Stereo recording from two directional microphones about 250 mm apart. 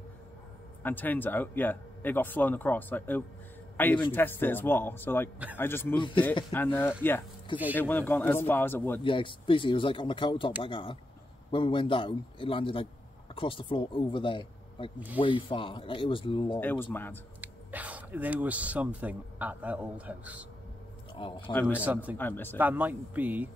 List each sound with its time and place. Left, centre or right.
0.8 s speech: centre
9.0 s speech: centre
16.5 s speech: centre
17.4 s speech: centre
21.1 s a man's voice: centre
21.5 s speech: centre
21.8 s speech: centre
22.1 s speech: centre
22.6 s speech: centre